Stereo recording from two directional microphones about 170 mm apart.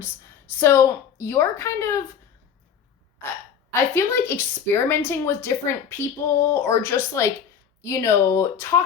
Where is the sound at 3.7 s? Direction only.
15° left (ahead or behind).